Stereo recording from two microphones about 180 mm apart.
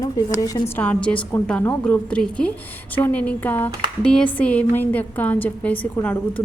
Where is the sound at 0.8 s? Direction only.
5° left (ahead or behind).